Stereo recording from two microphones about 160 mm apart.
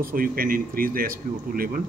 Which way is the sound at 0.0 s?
65° right (ahead or behind).